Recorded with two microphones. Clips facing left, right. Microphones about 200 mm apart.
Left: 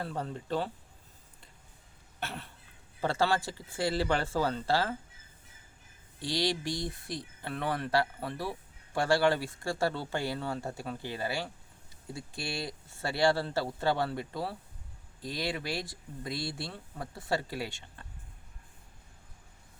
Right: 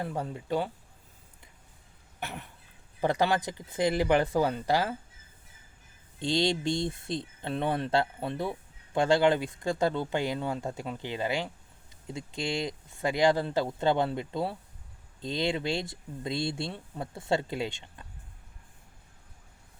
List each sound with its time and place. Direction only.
0.0 s speech: 15° right (ahead or behind)
2.2 s cough: 15° right (ahead or behind)
3.0 s speech: 15° right (ahead or behind)
6.1 s speech: 25° right (ahead or behind)